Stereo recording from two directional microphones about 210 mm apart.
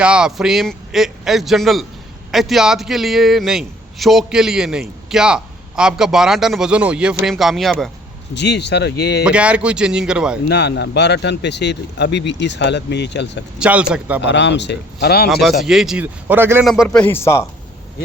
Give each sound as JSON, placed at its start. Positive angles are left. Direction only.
{"t": 0.0, "sound": "a man's voice", "side_deg": -5}
{"t": 8.4, "sound": "speech", "side_deg": 55}
{"t": 9.2, "sound": "a man's voice", "side_deg": -5}
{"t": 10.5, "sound": "speech", "side_deg": 55}
{"t": 13.6, "sound": "a man's voice", "side_deg": -5}
{"t": 14.2, "sound": "speech", "side_deg": 55}
{"t": 15.3, "sound": "a man's voice", "side_deg": 0}
{"t": 17.0, "sound": "speech", "side_deg": 10}